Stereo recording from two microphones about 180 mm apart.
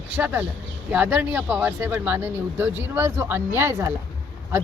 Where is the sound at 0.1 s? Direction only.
10° right (ahead or behind).